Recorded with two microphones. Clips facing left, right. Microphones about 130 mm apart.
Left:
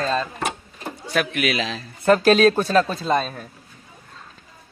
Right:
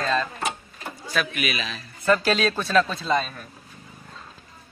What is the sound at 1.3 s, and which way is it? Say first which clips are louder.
Speech: left 6 dB; 85° left.